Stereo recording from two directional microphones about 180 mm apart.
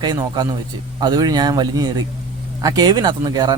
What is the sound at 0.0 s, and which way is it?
Speech, 25° right (ahead or behind).